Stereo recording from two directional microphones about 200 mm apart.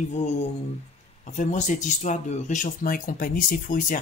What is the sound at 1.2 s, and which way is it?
Speech, 40° left (ahead or behind).